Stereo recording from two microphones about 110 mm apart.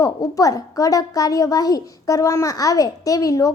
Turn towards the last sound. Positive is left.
turn(degrees=30)  # may be behind; listen again after turning